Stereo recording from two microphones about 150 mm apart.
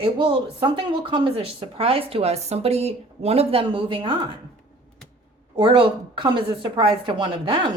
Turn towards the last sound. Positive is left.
turn(degrees=-35)  # may be behind; listen again after turning